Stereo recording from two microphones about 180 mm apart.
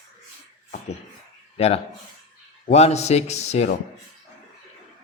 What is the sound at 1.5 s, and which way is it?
Speech, 35° left (ahead or behind).